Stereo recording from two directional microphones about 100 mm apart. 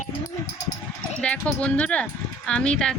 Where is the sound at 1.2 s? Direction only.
10° left (ahead or behind).